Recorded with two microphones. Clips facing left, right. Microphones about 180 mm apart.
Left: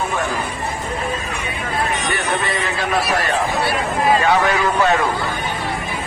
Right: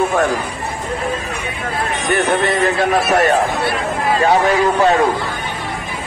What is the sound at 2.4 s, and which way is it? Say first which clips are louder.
Speech: right 7 dB; 50° right (ahead or behind).